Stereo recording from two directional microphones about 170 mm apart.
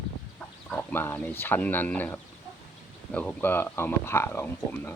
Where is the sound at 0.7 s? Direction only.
10° left (ahead or behind).